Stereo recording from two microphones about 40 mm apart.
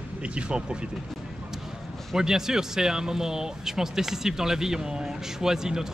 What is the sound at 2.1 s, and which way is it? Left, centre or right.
Speech, centre.